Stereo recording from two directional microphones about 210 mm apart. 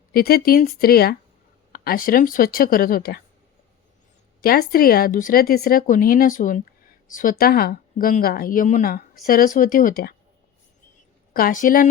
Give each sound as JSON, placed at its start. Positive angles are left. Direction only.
{"t": 0.1, "sound": "speech", "side_deg": 45}
{"t": 4.4, "sound": "speech", "side_deg": 45}
{"t": 11.3, "sound": "speech", "side_deg": 40}